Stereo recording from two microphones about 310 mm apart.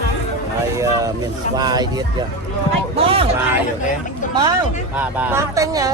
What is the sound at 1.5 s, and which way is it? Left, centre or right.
Speech, centre.